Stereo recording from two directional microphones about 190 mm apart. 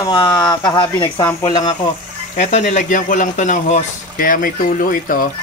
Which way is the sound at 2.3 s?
35° left (ahead or behind).